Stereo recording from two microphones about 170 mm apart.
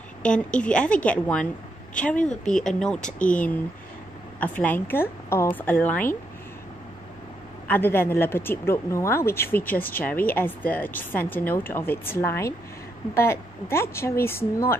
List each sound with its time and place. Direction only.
0.2 s speech: 5° left (ahead or behind)
7.6 s speech: 10° left (ahead or behind)